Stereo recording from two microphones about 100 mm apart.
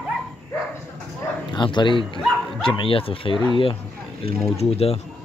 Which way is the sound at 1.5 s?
50° left (ahead or behind).